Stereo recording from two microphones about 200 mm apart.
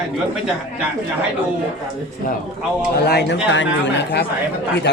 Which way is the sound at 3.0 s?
55° left (ahead or behind).